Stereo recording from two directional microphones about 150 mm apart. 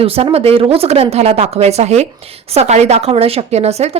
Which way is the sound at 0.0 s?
40° right (ahead or behind).